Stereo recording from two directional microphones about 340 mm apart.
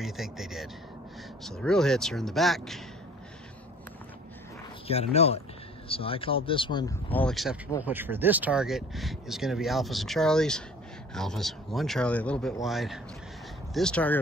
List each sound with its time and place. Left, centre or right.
0.0 s speech: centre
4.8 s speech: centre